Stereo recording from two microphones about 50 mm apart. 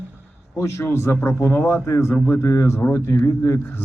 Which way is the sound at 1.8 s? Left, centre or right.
Left.